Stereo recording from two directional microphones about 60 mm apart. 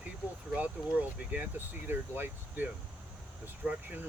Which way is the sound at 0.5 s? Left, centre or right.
Right.